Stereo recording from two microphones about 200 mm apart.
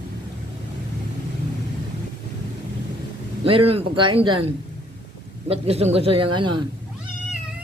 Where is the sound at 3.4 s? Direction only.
25° right (ahead or behind).